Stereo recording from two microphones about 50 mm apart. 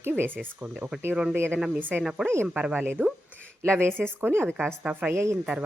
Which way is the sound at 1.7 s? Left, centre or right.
Right.